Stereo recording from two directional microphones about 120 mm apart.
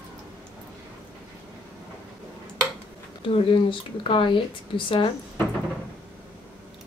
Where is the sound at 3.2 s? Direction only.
50° left (ahead or behind).